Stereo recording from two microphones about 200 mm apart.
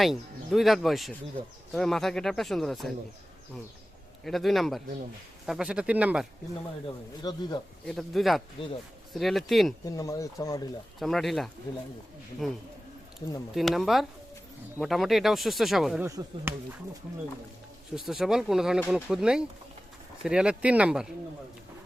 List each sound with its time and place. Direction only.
0.0 s speech: centre (ahead or behind)
4.2 s speech: centre (ahead or behind)
7.2 s speech: 20° left (ahead or behind)
7.9 s speech: centre (ahead or behind)
8.6 s speech: 25° left (ahead or behind)
9.1 s speech: centre (ahead or behind)
9.8 s speech: 15° left (ahead or behind)
11.0 s speech: centre (ahead or behind)
16.0 s speech: 15° right (ahead or behind)
17.9 s speech: centre (ahead or behind)
18.8 s speech: 10° left (ahead or behind)
19.0 s speech: 5° right (ahead or behind)